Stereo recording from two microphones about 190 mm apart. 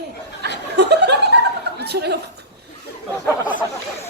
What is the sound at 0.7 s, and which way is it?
Chuckle, 60° right (ahead or behind).